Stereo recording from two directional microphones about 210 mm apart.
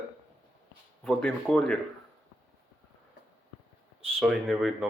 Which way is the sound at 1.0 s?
5° left (ahead or behind).